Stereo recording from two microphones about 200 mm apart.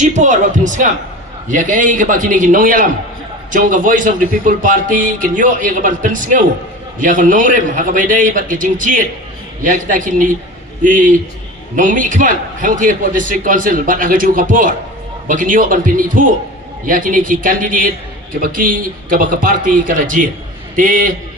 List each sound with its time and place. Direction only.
0.0 s a man's voice: 40° right (ahead or behind)